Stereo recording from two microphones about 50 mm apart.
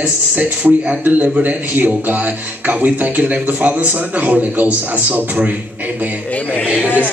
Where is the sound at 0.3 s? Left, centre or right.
Right.